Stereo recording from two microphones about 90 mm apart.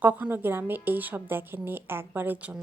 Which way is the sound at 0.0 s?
20° right (ahead or behind).